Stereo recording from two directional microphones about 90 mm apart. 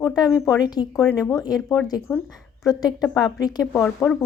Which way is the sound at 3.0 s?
5° right (ahead or behind).